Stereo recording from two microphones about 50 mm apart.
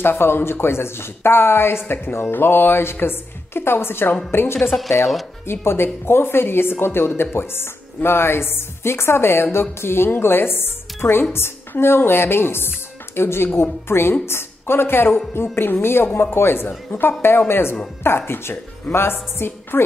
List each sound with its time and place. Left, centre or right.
0.0 s speech: left
4.6 s speech: centre
5.5 s a woman's voice: left